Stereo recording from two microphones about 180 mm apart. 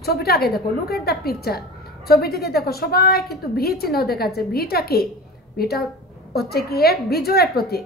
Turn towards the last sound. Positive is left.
turn(degrees=60)  # may be behind; listen again after turning